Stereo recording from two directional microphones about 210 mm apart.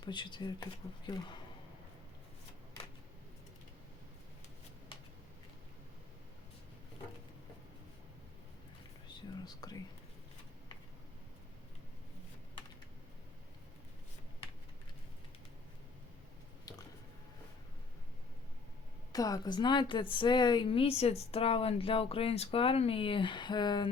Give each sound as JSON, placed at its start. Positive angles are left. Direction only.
{"t": 0.0, "sound": "a woman's voice", "side_deg": 20}
{"t": 9.1, "sound": "whispering", "side_deg": 20}
{"t": 16.7, "sound": "a sound", "side_deg": 15}
{"t": 19.1, "sound": "a woman's voice", "side_deg": 15}